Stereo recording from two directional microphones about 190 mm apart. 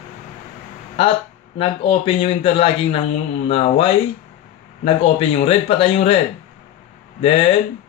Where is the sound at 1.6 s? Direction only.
30° left (ahead or behind).